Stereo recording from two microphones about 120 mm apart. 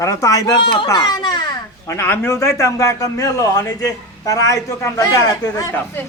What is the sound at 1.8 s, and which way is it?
A man's voice, 20° left (ahead or behind).